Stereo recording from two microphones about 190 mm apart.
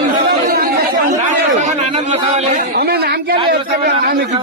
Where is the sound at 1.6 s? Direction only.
30° right (ahead or behind).